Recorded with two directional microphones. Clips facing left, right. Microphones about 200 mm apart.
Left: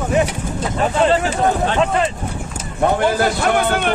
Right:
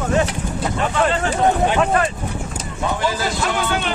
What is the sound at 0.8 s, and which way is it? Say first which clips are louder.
Speech: left 4 dB; 25° left (ahead or behind).